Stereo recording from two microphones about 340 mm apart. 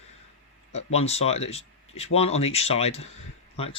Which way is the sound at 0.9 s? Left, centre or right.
Centre.